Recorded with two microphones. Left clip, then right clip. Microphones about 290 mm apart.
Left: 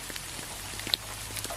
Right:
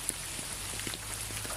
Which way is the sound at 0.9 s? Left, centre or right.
Left.